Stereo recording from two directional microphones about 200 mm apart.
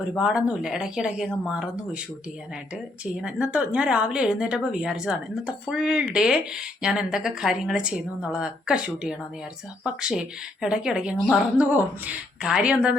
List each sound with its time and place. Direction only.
0.1 s a woman's voice: 5° right (ahead or behind)
3.0 s a woman's voice: 5° right (ahead or behind)